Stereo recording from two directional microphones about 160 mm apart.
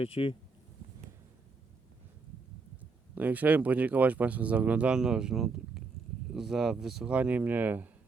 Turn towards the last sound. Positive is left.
turn(degrees=-10)  # may be behind; listen again after turning